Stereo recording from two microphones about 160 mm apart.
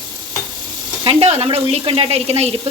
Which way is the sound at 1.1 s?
40° right (ahead or behind).